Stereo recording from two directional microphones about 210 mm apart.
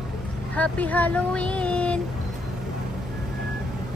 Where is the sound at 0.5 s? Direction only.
5° left (ahead or behind).